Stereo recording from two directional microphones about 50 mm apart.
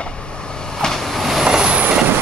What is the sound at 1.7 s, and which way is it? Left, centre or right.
Vehicle, right.